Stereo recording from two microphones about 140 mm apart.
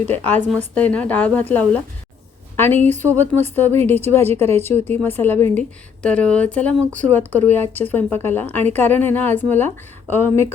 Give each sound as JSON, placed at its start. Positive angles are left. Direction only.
{"t": 0.7, "sound": "speech", "side_deg": 10}
{"t": 4.3, "sound": "a woman's voice", "side_deg": -50}
{"t": 4.6, "sound": "speech", "side_deg": 15}